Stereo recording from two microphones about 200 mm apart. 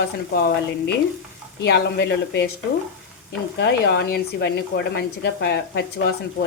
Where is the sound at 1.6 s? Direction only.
60° left (ahead or behind).